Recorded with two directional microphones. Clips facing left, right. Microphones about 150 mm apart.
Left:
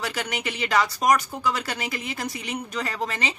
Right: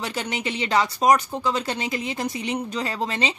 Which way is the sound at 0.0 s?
25° right (ahead or behind).